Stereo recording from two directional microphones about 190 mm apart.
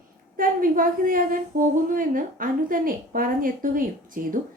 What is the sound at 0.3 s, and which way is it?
A woman's voice, 45° right (ahead or behind).